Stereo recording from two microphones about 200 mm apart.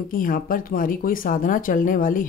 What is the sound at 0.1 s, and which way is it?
Speech, 45° left (ahead or behind).